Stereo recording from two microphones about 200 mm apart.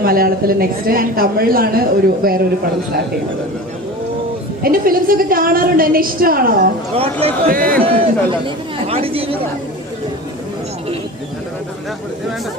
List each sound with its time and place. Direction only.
0.0 s a woman's voice: 50° right (ahead or behind)
4.6 s a woman's voice: 45° right (ahead or behind)
6.9 s speech: 30° right (ahead or behind)
7.4 s a woman's voice: 45° right (ahead or behind)
7.9 s speech: 25° right (ahead or behind)